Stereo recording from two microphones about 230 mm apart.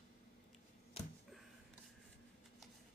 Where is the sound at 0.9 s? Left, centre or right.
Left.